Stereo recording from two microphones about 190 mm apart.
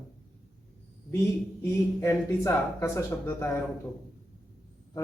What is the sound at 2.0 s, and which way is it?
Speech, 15° left (ahead or behind).